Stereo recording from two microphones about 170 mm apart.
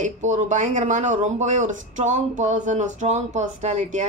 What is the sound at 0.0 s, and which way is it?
Speech, 45° right (ahead or behind).